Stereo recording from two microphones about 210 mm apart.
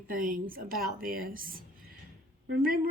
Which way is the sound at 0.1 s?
40° right (ahead or behind).